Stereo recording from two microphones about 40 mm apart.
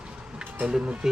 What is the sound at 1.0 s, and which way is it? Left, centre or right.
Speech, centre.